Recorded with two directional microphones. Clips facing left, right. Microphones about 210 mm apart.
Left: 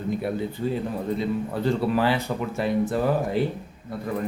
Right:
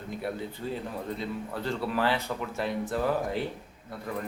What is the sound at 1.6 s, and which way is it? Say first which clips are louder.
Speech: left 6 dB; 15° left (ahead or behind).